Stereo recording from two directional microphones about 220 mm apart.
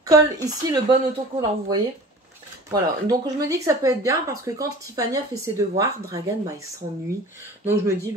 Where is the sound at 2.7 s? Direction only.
15° right (ahead or behind).